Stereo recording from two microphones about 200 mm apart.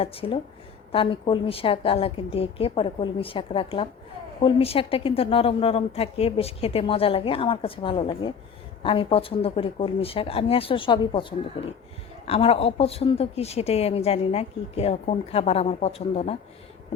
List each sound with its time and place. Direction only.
0.0 s a woman's voice: 30° left (ahead or behind)